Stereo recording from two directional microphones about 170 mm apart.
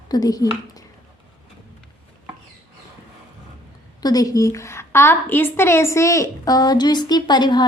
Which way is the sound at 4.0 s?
20° left (ahead or behind).